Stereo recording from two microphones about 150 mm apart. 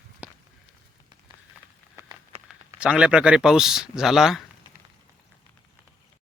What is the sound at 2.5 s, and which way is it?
Speech, 5° right (ahead or behind).